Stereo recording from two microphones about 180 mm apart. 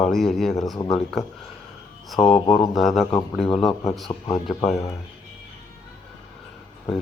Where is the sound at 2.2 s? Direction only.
30° left (ahead or behind).